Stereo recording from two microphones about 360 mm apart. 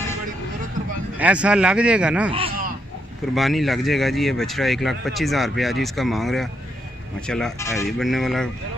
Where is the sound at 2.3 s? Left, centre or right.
Centre.